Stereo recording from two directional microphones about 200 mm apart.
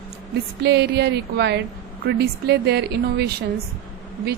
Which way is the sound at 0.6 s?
55° right (ahead or behind).